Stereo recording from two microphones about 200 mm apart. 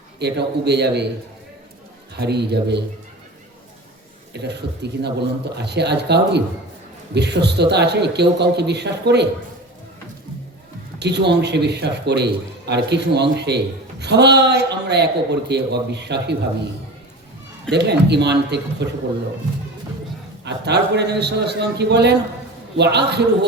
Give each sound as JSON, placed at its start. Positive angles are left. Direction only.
{"t": 0.2, "sound": "a man's voice", "side_deg": -55}
{"t": 2.1, "sound": "a man's voice", "side_deg": -55}
{"t": 4.4, "sound": "a man's voice", "side_deg": -55}
{"t": 11.0, "sound": "a man's voice", "side_deg": -55}
{"t": 17.7, "sound": "a man's voice", "side_deg": -55}
{"t": 20.4, "sound": "a man's voice", "side_deg": -60}